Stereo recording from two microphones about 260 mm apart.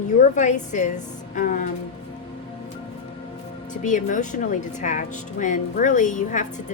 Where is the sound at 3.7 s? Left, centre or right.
Left.